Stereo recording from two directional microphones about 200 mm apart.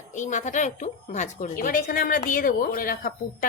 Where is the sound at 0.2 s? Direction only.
40° left (ahead or behind).